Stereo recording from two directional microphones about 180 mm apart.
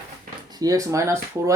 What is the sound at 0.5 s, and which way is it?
Speech, 20° right (ahead or behind).